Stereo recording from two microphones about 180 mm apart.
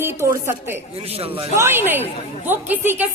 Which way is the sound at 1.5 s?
10° right (ahead or behind).